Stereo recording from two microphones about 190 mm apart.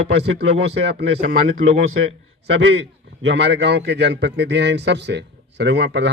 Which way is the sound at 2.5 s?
70° right (ahead or behind).